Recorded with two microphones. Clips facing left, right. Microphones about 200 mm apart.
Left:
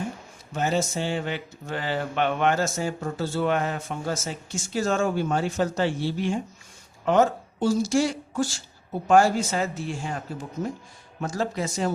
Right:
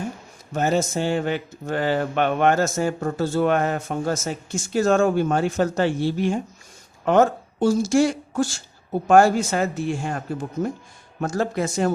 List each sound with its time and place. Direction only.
0.5 s speech: 45° right (ahead or behind)